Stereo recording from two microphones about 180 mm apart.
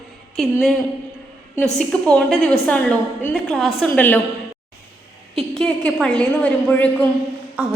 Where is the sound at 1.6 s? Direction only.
5° left (ahead or behind).